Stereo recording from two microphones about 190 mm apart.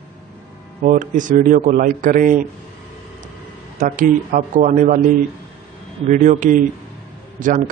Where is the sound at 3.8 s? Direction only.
45° right (ahead or behind).